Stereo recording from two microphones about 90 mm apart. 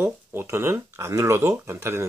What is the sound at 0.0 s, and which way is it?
Speech, 25° right (ahead or behind).